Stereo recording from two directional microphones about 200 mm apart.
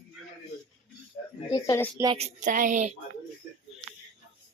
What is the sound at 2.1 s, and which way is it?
Speech, 35° right (ahead or behind).